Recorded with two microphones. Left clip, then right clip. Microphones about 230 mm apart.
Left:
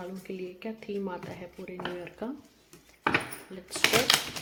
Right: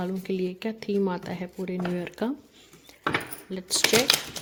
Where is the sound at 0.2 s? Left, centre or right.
Right.